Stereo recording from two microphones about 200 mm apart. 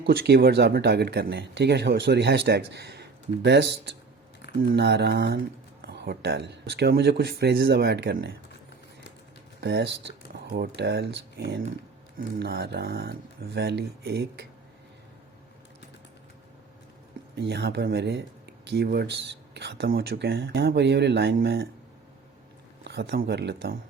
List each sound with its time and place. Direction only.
0.0 s speech: 55° right (ahead or behind)
9.6 s speech: 55° right (ahead or behind)
17.3 s speech: 55° right (ahead or behind)
22.8 s speech: 55° right (ahead or behind)